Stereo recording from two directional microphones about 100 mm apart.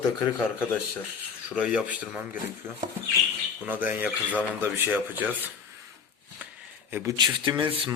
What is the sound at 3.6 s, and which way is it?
Speech, 15° right (ahead or behind).